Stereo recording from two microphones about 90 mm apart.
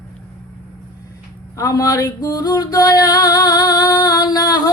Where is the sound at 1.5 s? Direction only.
40° left (ahead or behind).